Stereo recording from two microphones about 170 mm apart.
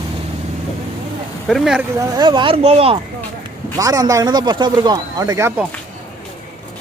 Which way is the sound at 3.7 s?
20° right (ahead or behind).